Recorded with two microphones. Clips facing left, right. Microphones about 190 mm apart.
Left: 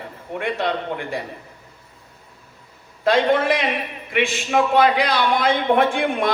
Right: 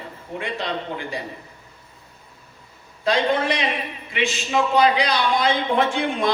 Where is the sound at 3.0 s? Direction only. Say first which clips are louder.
Left 3 dB; 60° left (ahead or behind).